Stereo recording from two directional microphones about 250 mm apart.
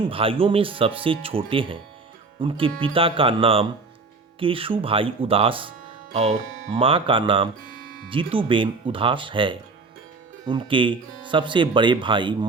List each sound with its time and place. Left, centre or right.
0.1 s speech: right
6.7 s speech: right